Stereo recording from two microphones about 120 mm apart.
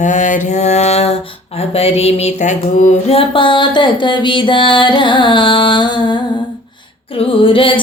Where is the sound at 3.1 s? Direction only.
45° left (ahead or behind).